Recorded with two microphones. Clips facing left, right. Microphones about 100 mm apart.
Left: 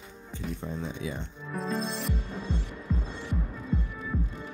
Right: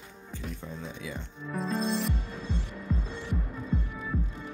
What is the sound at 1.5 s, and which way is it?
Music, centre (ahead or behind).